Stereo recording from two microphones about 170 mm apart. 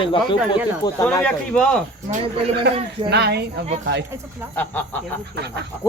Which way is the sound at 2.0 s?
35° right (ahead or behind).